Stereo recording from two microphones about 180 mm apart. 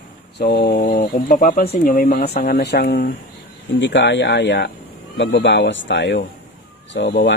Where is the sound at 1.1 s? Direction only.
50° left (ahead or behind); by 3.1 s 70° left (ahead or behind).